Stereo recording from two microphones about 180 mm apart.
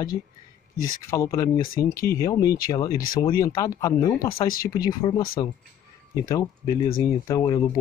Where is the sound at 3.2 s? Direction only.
20° left (ahead or behind).